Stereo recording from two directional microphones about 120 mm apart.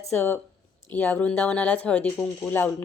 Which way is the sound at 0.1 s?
20° left (ahead or behind).